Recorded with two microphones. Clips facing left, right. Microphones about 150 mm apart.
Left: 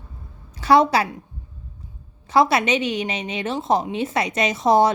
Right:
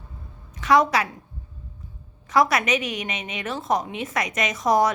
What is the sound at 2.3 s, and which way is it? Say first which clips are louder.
A woman's voice: left 3 dB; 30° left (ahead or behind).